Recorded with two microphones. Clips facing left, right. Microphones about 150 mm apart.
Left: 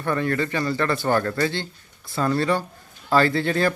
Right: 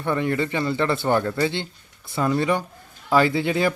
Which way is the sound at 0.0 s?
20° right (ahead or behind).